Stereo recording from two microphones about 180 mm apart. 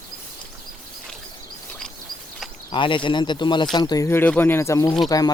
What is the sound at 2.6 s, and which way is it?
Speech, 25° left (ahead or behind).